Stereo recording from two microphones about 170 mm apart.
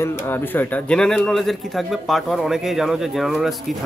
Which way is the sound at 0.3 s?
10° left (ahead or behind).